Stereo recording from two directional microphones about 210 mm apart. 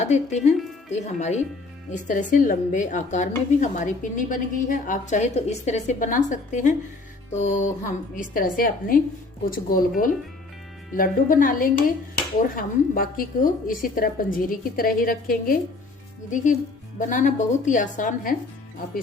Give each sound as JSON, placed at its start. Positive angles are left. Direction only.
{"t": 0.0, "sound": "a woman's voice", "side_deg": 35}